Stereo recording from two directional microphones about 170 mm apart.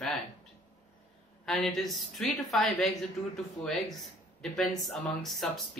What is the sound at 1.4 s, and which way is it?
Speech, centre (ahead or behind).